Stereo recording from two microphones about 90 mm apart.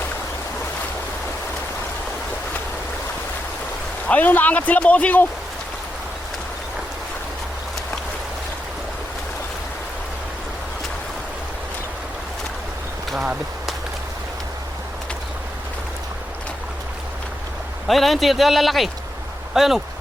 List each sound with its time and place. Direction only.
4.1 s speech: 20° left (ahead or behind)
17.8 s speech: centre (ahead or behind)